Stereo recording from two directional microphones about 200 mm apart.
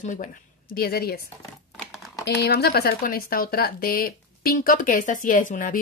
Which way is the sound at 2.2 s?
55° left (ahead or behind).